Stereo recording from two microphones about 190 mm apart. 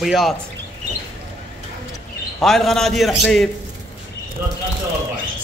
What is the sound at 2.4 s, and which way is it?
A man's voice, centre (ahead or behind).